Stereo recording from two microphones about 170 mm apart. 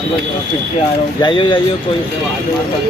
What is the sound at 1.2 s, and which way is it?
Speech, 30° left (ahead or behind).